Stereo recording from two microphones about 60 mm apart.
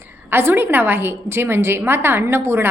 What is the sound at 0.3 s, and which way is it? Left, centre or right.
A woman's voice, right.